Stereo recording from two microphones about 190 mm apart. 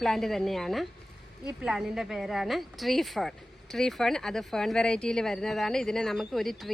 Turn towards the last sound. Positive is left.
turn(degrees=0)  # may be behind; listen again after turning